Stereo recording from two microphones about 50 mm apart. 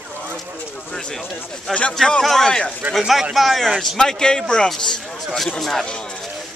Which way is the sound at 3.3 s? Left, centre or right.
Centre.